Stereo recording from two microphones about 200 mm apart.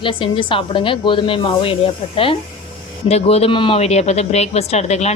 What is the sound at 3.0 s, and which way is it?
Speech, 30° left (ahead or behind).